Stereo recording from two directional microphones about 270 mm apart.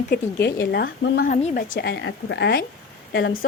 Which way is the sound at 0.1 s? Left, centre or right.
Left.